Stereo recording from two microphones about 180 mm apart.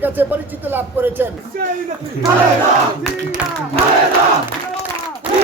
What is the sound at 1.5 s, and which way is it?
Speech, 55° right (ahead or behind).